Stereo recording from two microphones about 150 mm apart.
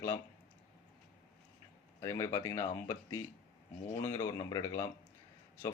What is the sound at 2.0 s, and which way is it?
Speech, 20° left (ahead or behind).